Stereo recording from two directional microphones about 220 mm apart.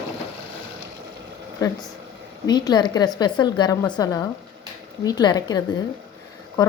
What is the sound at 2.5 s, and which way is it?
A woman's voice, 20° left (ahead or behind).